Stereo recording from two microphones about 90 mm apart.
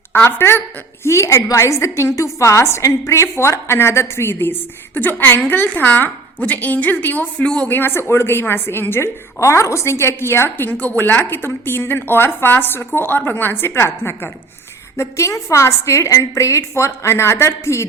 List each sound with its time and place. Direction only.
0.1 s a woman's voice: 25° left (ahead or behind); by 7.7 s 10° left (ahead or behind)
7.7 s a woman's voice: 25° left (ahead or behind)